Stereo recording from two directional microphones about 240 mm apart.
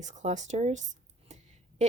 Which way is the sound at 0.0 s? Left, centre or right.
Right.